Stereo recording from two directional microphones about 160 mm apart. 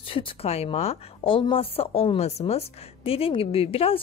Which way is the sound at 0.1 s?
35° left (ahead or behind).